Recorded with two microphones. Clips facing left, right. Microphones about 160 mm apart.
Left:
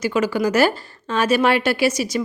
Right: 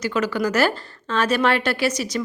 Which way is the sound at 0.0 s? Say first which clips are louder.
Left 3 dB; 10° left (ahead or behind).